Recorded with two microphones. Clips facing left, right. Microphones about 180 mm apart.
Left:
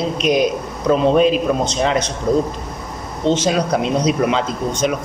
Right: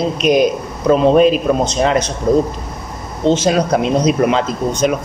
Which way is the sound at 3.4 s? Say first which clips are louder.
Right 3 dB; 50° right (ahead or behind).